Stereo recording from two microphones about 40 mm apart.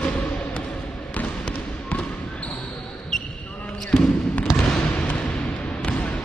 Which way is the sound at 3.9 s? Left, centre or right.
Centre.